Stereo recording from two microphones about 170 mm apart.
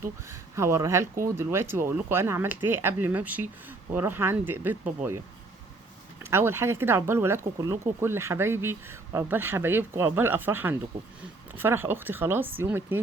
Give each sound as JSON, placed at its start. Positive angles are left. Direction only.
{"t": 0.0, "sound": "speech", "side_deg": -15}
{"t": 6.3, "sound": "speech", "side_deg": -15}